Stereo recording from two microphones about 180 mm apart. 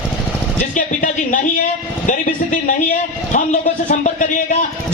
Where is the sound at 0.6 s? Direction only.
45° left (ahead or behind).